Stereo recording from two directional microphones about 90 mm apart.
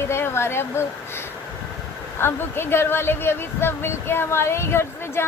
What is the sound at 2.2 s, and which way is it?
Speech, 25° left (ahead or behind).